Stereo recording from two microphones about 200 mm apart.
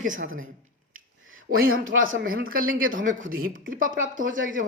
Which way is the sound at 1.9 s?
80° right.